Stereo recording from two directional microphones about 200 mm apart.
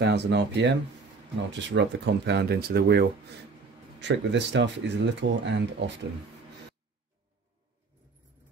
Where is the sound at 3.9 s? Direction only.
65° right (ahead or behind).